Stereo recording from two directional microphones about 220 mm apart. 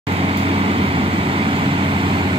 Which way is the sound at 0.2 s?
25° right (ahead or behind).